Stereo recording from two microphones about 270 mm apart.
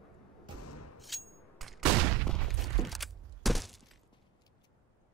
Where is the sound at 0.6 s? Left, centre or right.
Left.